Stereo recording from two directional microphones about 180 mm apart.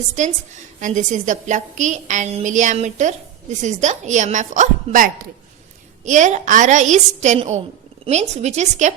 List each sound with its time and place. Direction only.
0.2 s a woman's voice: 40° right (ahead or behind)